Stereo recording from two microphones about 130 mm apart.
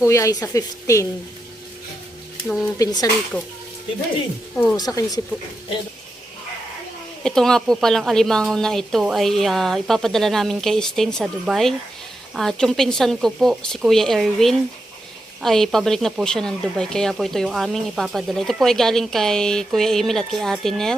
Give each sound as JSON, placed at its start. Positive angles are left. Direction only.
{"t": 0.0, "sound": "a woman's voice", "side_deg": 25}
{"t": 2.7, "sound": "a woman's voice", "side_deg": 30}
{"t": 4.5, "sound": "speech", "side_deg": 10}
{"t": 4.8, "sound": "a woman's voice", "side_deg": 30}
{"t": 7.3, "sound": "speech", "side_deg": 5}